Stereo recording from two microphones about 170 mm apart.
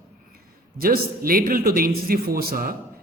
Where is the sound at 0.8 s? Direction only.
60° right (ahead or behind).